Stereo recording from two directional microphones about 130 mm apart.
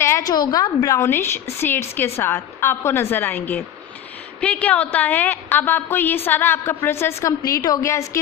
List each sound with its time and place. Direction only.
0.3 s a woman's voice: 30° left (ahead or behind)